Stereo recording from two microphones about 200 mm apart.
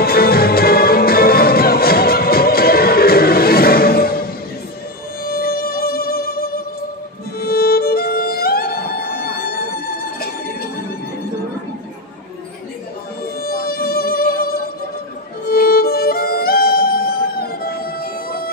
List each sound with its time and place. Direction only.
0.0 s music: 50° left (ahead or behind)
13.4 s music: 50° left (ahead or behind)